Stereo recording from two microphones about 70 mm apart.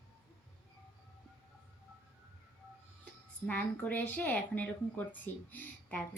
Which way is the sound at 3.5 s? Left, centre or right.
Left.